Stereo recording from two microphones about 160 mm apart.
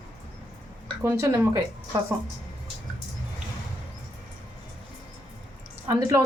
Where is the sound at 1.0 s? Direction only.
15° right (ahead or behind).